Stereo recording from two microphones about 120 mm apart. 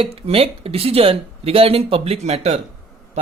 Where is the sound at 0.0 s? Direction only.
55° right (ahead or behind).